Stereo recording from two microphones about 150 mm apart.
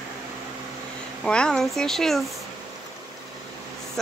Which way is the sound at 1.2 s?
5° left (ahead or behind).